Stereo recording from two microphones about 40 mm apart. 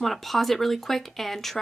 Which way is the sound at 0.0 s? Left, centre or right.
Centre.